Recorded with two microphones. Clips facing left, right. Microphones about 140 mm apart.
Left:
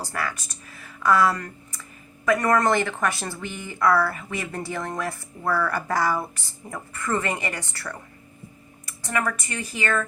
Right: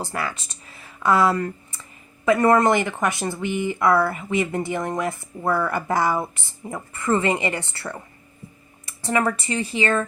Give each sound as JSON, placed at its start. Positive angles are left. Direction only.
{"t": 0.0, "sound": "speech", "side_deg": -20}